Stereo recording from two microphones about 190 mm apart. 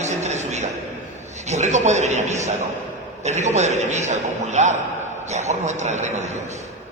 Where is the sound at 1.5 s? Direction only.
35° right (ahead or behind).